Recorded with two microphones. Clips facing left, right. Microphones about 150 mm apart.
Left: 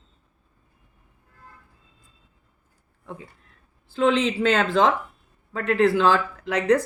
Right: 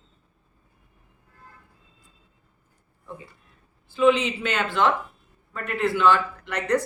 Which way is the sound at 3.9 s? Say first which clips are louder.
Right 1 dB; 90° left.